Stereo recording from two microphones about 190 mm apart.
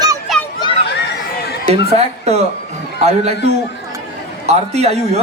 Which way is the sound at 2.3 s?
35° right (ahead or behind).